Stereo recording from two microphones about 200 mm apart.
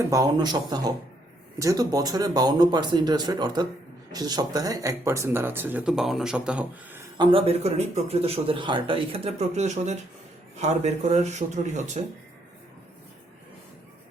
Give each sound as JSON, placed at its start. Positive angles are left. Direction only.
{"t": 0.0, "sound": "a man's voice", "side_deg": -15}
{"t": 7.2, "sound": "a man's voice", "side_deg": -25}